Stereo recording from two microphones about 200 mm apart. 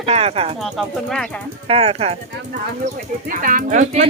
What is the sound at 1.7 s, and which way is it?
Speech, 30° right (ahead or behind).